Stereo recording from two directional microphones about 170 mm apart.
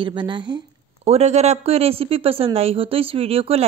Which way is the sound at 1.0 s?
40° right (ahead or behind).